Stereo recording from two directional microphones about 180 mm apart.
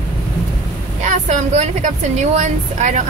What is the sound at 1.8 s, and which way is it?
Speech, 40° right (ahead or behind).